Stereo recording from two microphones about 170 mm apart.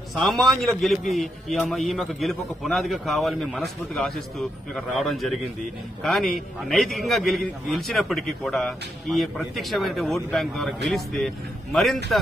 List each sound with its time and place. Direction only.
0.1 s a man's voice: centre (ahead or behind)